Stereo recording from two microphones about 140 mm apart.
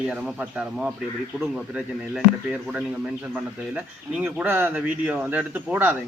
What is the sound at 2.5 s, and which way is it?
Speech, 5° right (ahead or behind).